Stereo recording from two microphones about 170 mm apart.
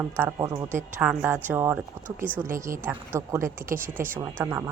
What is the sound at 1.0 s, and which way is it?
Speech, 10° right (ahead or behind).